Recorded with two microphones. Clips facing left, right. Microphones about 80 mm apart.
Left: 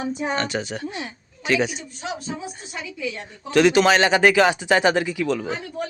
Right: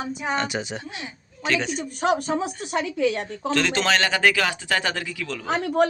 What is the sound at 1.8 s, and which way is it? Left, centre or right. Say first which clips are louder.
Speech: right 9 dB; right.